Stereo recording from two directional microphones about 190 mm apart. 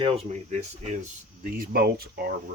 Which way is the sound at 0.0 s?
35° right (ahead or behind).